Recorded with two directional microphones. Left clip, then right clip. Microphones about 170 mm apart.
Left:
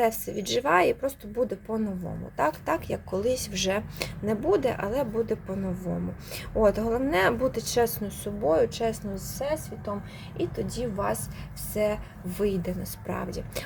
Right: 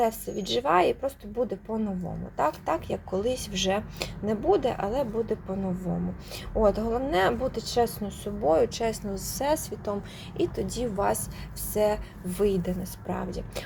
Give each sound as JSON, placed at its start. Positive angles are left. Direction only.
{"t": 0.0, "sound": "speech", "side_deg": 15}
{"t": 8.4, "sound": "a woman's voice", "side_deg": 0}